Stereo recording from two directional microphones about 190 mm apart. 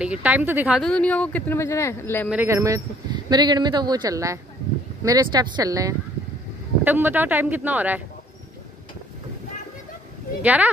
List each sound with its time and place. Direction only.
0.0 s speech: 5° right (ahead or behind); by 2.2 s 15° left (ahead or behind)
2.2 s speech: 10° right (ahead or behind)
10.4 s speech: 10° right (ahead or behind)